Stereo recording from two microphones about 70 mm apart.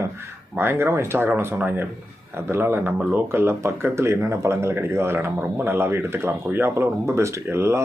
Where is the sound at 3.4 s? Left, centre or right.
Right.